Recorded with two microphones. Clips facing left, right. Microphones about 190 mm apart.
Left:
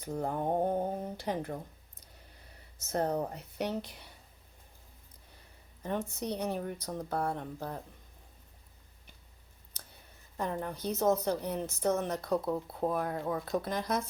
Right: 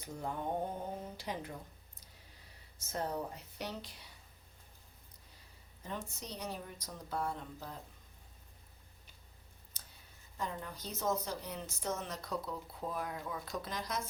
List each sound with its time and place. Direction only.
0.1 s speech: 55° left (ahead or behind)
2.9 s a woman's voice: 55° left (ahead or behind)
5.8 s a woman's voice: 60° left (ahead or behind)
10.3 s a woman's voice: 55° left (ahead or behind)